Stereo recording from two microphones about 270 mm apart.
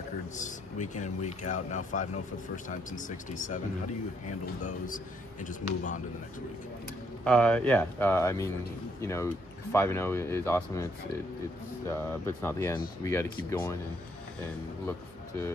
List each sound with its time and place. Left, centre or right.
0.4 s speech: left
4.6 s speech: left
7.2 s speech: centre
11.9 s speech: centre